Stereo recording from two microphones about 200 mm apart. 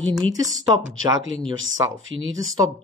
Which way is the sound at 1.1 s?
20° right (ahead or behind).